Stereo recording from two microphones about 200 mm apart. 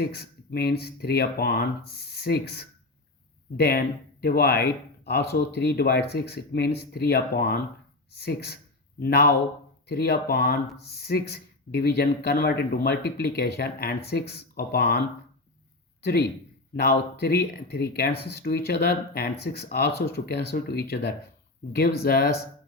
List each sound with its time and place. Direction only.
0.0 s speech: 50° left (ahead or behind)
16.7 s speech: 55° left (ahead or behind)